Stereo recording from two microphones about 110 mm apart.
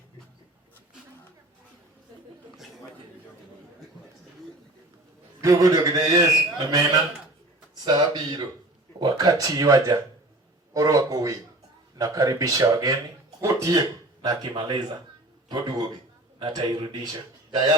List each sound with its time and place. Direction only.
5.4 s a man's voice: 30° right (ahead or behind)
16.4 s a man's voice: 40° right (ahead or behind)